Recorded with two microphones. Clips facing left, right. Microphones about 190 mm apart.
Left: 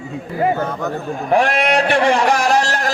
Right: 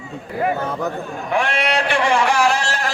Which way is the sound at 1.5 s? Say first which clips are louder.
Left 4 dB; 50° left (ahead or behind).